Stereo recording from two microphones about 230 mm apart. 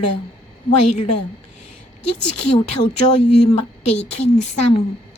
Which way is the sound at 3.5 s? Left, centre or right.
Left.